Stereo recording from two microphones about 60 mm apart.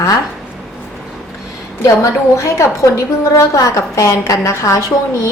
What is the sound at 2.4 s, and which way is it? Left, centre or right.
A woman's voice, left.